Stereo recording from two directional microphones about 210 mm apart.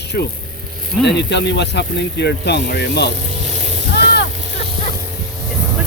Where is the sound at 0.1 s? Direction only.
50° left (ahead or behind).